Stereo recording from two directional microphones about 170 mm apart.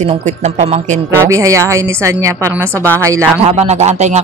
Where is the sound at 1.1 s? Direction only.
20° right (ahead or behind).